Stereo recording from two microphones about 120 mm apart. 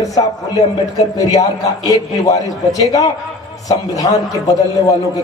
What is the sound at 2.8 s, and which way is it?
A man's voice, 30° left (ahead or behind).